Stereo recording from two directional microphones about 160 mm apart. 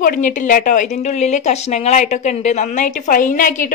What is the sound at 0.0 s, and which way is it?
A woman's voice, 55° left (ahead or behind).